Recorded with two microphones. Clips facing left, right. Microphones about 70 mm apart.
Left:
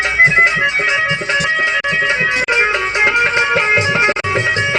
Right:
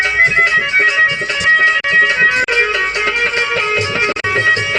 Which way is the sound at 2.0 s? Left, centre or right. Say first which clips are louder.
Right 3 dB; left.